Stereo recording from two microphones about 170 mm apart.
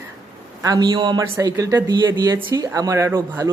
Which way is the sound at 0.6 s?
20° right (ahead or behind).